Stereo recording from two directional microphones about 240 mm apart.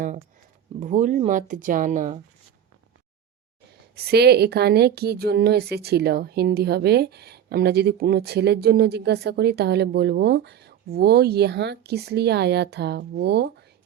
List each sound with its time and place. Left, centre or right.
0.8 s speech: right
3.9 s speech: right